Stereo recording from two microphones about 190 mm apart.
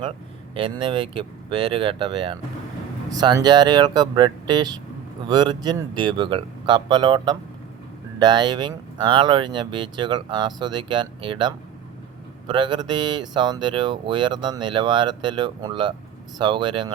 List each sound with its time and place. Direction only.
0.5 s speech: 25° right (ahead or behind)